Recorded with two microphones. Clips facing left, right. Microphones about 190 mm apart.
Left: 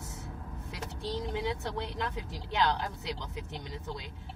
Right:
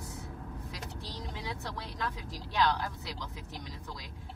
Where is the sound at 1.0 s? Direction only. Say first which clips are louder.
Left 10 dB; 20° left (ahead or behind).